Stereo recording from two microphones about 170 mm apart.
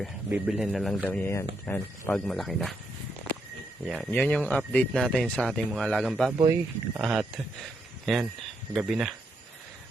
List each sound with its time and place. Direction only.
0.3 s speech: 5° right (ahead or behind)
4.1 s speech: 10° left (ahead or behind)
6.4 s speech: 20° right (ahead or behind)
7.0 s speech: centre (ahead or behind)